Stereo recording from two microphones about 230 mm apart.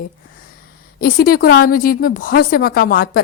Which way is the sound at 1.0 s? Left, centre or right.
Left.